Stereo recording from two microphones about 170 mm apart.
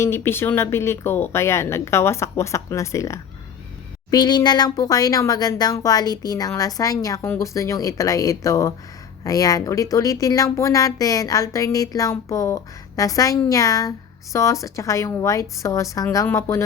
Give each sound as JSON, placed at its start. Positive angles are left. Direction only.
{"t": 0.0, "sound": "speech", "side_deg": 15}